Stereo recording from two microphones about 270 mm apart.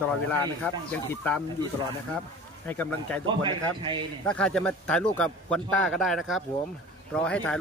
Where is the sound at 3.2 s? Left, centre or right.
Centre.